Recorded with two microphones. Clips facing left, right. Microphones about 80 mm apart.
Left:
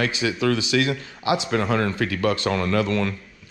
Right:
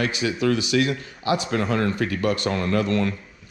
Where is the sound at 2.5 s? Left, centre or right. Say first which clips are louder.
Left 1 dB; left.